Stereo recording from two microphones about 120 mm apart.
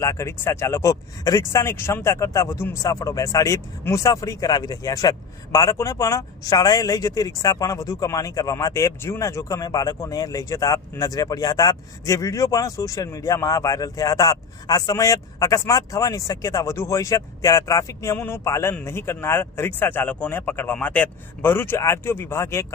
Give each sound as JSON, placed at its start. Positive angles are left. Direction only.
{"t": 0.0, "sound": "speech", "side_deg": 25}